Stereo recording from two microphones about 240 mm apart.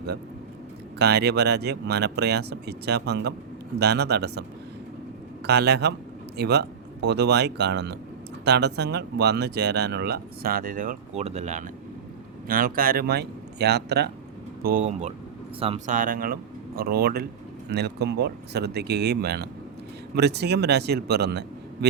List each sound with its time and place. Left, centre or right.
0.9 s speech: right
5.5 s speech: right